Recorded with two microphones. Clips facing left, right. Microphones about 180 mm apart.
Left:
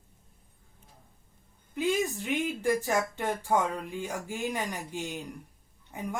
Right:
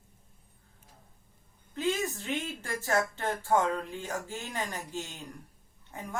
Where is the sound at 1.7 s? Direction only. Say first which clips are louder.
Left 3 dB; 15° left (ahead or behind).